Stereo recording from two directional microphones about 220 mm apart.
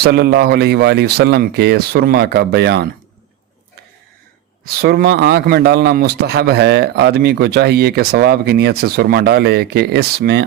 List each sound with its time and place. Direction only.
0.0 s a man's voice: 45° right (ahead or behind)
4.6 s a man's voice: 45° right (ahead or behind)